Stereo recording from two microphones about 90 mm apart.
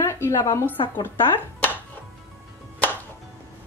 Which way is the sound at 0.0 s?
30° left (ahead or behind).